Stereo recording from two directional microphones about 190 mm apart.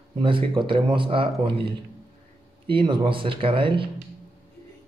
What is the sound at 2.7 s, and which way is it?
A man's voice, 25° right (ahead or behind).